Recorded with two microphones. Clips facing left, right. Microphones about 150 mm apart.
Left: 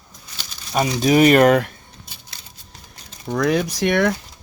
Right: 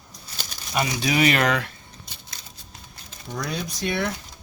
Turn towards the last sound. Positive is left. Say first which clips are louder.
# left 8 dB
turn(degrees=90)